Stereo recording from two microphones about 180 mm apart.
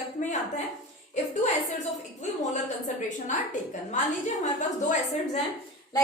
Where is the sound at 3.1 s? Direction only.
45° left (ahead or behind).